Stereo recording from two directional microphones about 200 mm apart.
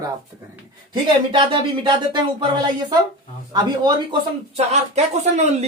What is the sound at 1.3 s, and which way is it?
Speech, 20° right (ahead or behind).